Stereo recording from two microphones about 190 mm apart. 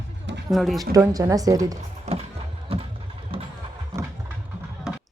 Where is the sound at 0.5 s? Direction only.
Centre (ahead or behind).